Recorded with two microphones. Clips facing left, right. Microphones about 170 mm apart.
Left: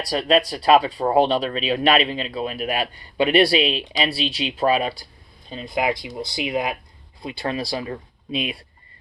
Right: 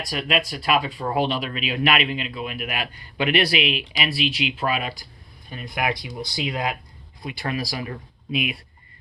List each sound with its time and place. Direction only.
0.0 s speech: 35° left (ahead or behind)